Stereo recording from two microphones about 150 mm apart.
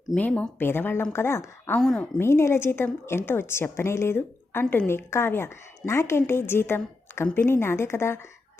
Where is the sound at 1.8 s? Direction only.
5° left (ahead or behind).